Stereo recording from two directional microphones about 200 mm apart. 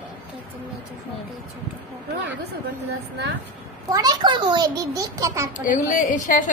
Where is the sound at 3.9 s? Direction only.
20° right (ahead or behind).